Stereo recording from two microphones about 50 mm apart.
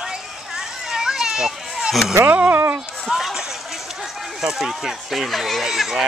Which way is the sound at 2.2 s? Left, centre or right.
Right.